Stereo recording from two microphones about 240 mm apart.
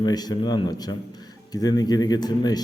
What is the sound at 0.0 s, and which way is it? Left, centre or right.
Speech, centre.